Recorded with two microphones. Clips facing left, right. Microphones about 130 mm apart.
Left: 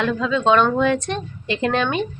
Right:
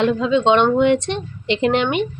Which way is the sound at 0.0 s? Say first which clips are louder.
Right 3 dB; 25° right (ahead or behind).